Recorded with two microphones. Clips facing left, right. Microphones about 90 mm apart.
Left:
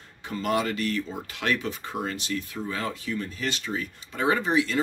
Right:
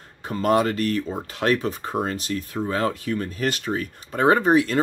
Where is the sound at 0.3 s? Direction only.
45° right (ahead or behind).